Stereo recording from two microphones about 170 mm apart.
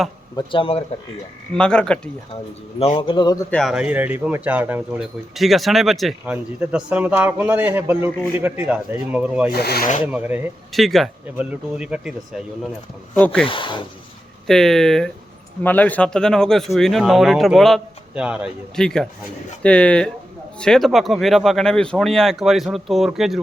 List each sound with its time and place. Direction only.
0.3 s speech: 30° left (ahead or behind)
1.5 s speech: 5° left (ahead or behind)
2.3 s speech: 35° left (ahead or behind)
3.2 s speech: 25° left (ahead or behind)
3.5 s a man's voice: centre (ahead or behind)
9.5 s speech: 70° left (ahead or behind)
10.1 s a man's voice: 10° right (ahead or behind)
10.7 s a man's voice: centre (ahead or behind)
13.1 s speech: 10° left (ahead or behind)
13.4 s speech: 30° left (ahead or behind)
14.4 s speech: centre (ahead or behind)
18.8 s speech: 5° left (ahead or behind)